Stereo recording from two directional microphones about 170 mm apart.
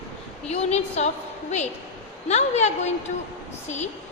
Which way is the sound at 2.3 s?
40° left (ahead or behind).